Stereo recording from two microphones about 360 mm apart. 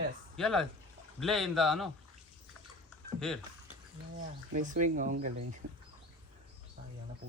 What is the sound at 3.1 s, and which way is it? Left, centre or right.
Speech, centre.